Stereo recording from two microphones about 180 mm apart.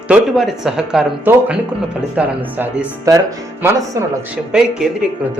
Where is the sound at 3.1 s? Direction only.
20° right (ahead or behind).